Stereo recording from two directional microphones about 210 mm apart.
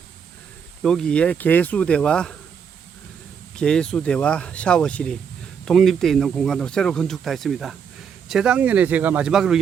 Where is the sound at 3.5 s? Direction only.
5° left (ahead or behind).